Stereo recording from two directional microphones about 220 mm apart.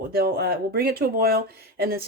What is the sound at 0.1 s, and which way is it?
Speech, 45° right (ahead or behind).